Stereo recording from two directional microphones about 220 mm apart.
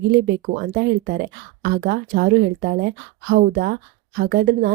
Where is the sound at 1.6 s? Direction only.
45° right (ahead or behind).